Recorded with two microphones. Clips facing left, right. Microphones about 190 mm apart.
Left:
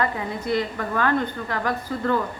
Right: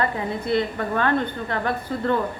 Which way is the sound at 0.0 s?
30° right (ahead or behind).